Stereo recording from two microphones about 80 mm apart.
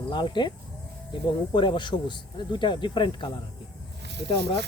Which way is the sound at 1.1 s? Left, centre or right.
Left.